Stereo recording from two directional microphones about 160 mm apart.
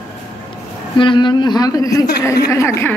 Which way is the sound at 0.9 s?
30° left (ahead or behind).